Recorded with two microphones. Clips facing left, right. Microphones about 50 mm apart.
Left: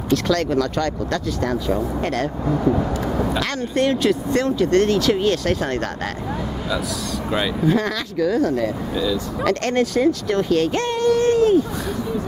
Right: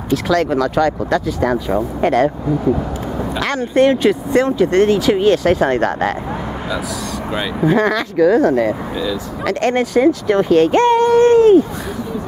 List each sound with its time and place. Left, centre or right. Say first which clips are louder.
0.1 s speech: right 3 dB; centre
2.6 s a sound: right 1 dB; centre
3.4 s speech: right 7 dB; centre
7.6 s speech: right 10 dB; centre
9.0 s speech: left 1 dB; centre; by 11.6 s right